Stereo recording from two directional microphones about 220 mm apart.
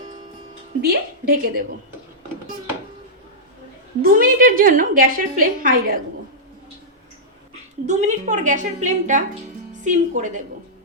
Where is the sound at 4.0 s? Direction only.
40° right (ahead or behind).